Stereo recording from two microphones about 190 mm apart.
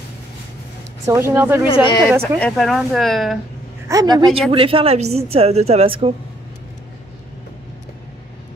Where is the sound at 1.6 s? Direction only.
25° left (ahead or behind).